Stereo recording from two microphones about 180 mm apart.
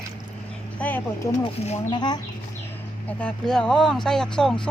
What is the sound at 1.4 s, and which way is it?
Speech, 30° left (ahead or behind).